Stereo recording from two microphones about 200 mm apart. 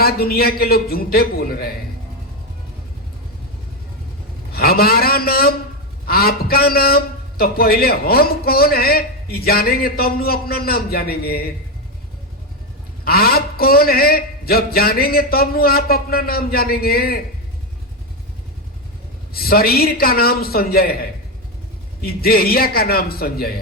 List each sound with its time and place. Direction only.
0.0 s a man's voice: 50° left (ahead or behind)
4.5 s a man's voice: 50° left (ahead or behind)
13.1 s a man's voice: 50° left (ahead or behind)
19.3 s a man's voice: 50° left (ahead or behind)